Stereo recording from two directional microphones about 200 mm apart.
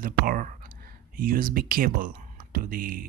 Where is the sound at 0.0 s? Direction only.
45° right (ahead or behind).